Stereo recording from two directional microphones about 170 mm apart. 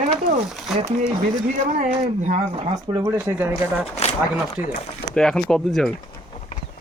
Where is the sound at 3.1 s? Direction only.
15° right (ahead or behind).